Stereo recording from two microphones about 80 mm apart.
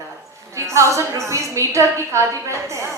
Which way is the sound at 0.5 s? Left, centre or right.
Right.